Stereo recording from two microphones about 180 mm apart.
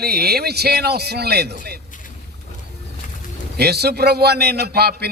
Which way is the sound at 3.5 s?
65° right (ahead or behind).